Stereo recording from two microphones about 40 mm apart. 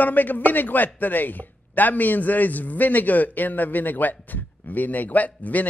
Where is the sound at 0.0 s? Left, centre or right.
Left.